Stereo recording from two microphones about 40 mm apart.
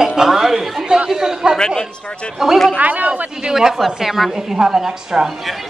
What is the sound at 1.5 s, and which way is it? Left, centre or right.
Speech, centre.